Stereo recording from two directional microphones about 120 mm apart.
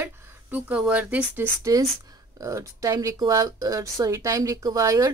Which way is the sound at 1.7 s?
30° right (ahead or behind).